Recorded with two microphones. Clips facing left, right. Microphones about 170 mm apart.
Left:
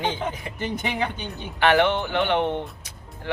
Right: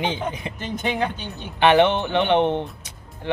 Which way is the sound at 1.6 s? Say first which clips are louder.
Right 3 dB; 20° right (ahead or behind).